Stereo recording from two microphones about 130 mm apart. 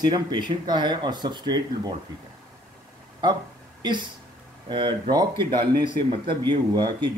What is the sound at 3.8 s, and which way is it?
Speech, 35° right (ahead or behind).